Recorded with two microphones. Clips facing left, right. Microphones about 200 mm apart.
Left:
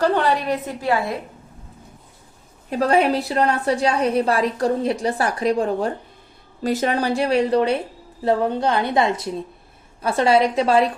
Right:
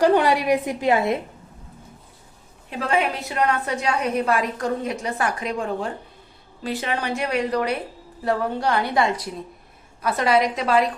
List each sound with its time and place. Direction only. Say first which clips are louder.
0.0 s a woman's voice: right 2 dB; 15° right (ahead or behind)
2.6 s a woman's voice: left 6 dB; 40° left (ahead or behind)